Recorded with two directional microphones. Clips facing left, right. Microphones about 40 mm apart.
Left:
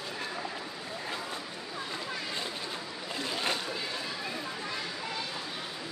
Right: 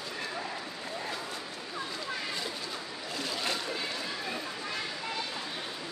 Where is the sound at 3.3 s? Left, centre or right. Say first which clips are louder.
Left 2 dB; left.